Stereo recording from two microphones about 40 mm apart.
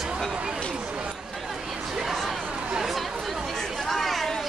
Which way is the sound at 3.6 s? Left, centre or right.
Centre.